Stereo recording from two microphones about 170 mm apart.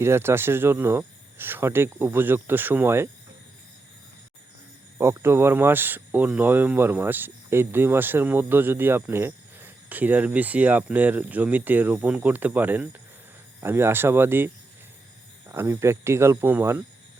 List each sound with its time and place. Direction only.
0.0 s speech: 15° right (ahead or behind)
4.9 s speech: 15° right (ahead or behind)